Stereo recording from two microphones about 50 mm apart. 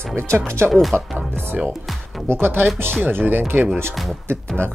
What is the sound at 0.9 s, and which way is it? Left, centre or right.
Speech, right.